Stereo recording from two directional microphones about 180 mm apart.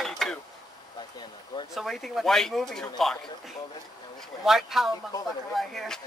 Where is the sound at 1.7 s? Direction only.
Centre (ahead or behind).